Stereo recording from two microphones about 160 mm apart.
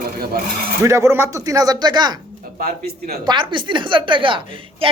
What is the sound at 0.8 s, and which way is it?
A woman's voice, 15° right (ahead or behind).